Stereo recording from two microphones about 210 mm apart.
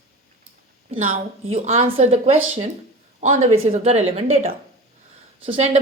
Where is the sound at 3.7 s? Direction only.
30° right (ahead or behind).